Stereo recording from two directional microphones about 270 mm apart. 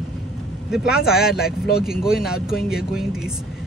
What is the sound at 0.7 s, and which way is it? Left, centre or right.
Speech, centre.